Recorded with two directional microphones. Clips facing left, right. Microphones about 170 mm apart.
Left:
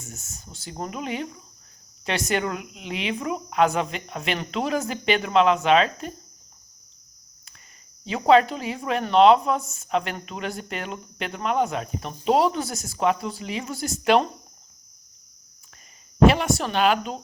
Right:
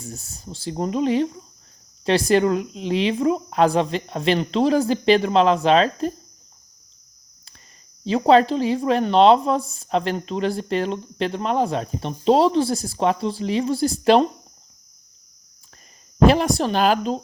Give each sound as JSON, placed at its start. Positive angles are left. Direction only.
{"t": 0.0, "sound": "speech", "side_deg": -35}
{"t": 8.0, "sound": "speech", "side_deg": -35}
{"t": 16.2, "sound": "speech", "side_deg": -35}